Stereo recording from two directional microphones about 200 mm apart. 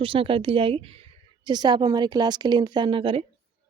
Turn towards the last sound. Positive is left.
turn(degrees=-25)  # may be behind; listen again after turning